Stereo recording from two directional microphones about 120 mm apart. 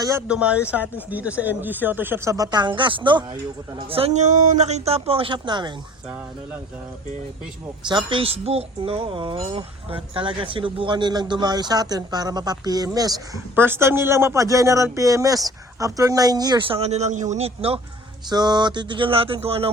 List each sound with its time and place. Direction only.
0.0 s a man's voice: 25° right (ahead or behind)
0.3 s speech: 10° right (ahead or behind); by 5.7 s 40° right (ahead or behind)
7.9 s speech: 40° right (ahead or behind)
13.6 s a man's voice: 20° right (ahead or behind); by 16.7 s 40° right (ahead or behind)
16.8 s speech: 65° right (ahead or behind)
18.3 s a sound: 35° right (ahead or behind); by 19.7 s 55° right (ahead or behind)